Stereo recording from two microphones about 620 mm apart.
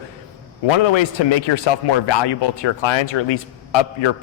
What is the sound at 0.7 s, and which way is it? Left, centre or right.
A man's voice, left.